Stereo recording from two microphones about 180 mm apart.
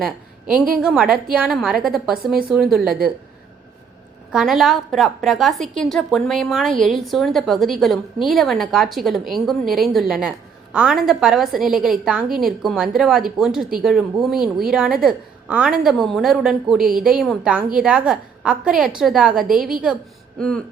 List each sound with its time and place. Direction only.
0.0 s a sound: 5° right (ahead or behind)
0.8 s speech: 5° right (ahead or behind)
4.3 s speech: centre (ahead or behind)
19.5 s a woman's voice: 50° right (ahead or behind)